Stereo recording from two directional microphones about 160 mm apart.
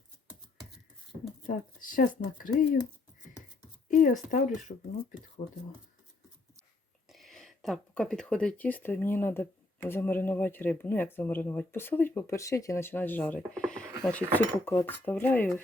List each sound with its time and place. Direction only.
1.5 s speech: 55° left (ahead or behind)
3.8 s speech: 55° left (ahead or behind)
7.1 s speech: centre (ahead or behind)